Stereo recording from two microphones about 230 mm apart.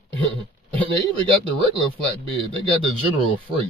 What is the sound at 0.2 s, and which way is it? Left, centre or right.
Speech, right.